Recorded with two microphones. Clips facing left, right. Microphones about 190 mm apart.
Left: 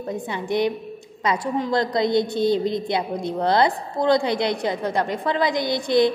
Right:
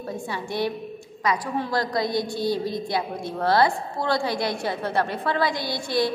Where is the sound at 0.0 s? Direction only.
20° left (ahead or behind).